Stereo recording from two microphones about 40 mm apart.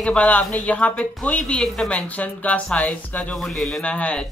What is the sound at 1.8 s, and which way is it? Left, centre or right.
Speech, left.